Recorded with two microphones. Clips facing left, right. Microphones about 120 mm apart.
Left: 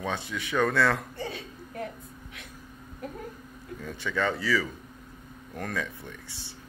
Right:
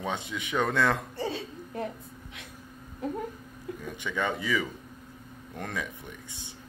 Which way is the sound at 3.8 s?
15° right (ahead or behind).